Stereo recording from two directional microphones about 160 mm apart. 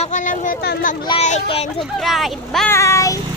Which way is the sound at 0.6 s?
85° left.